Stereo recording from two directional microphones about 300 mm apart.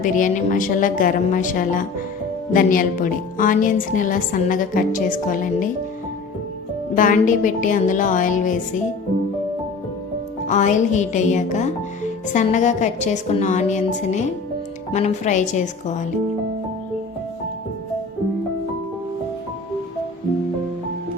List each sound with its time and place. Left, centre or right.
0.0 s a woman's voice: left
6.9 s a woman's voice: left
10.4 s a woman's voice: left